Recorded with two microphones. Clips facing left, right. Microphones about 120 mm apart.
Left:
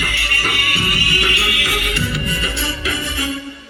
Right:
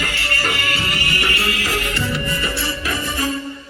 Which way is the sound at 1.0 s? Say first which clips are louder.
Left 1 dB; 15° left (ahead or behind).